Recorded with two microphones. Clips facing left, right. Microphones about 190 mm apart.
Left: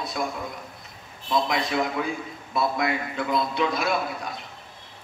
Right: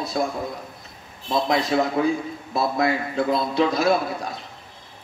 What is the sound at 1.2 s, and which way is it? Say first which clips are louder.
A man's voice: right 3 dB; 30° right (ahead or behind).